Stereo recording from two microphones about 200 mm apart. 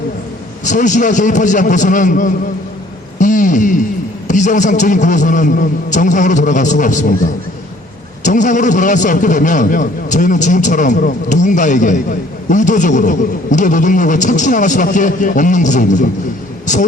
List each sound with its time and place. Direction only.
0.6 s a man's voice: 40° left (ahead or behind)